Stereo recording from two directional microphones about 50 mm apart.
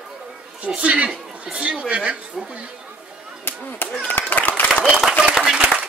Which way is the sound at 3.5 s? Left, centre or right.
Left.